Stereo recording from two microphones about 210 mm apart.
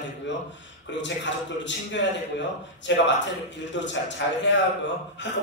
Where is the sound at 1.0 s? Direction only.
60° left (ahead or behind).